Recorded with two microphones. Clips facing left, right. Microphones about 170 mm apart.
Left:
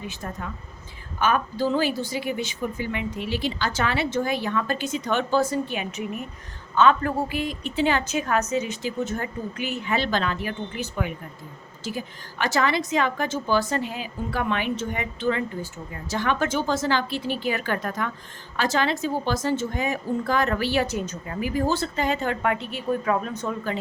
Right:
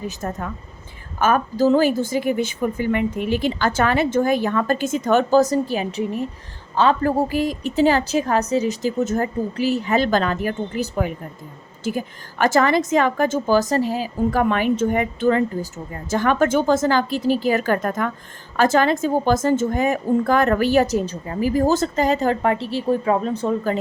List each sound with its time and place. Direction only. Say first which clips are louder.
0.0 s a woman's voice: right 6 dB; 45° right (ahead or behind)
11.8 s a woman's voice: right 7 dB; 50° right (ahead or behind)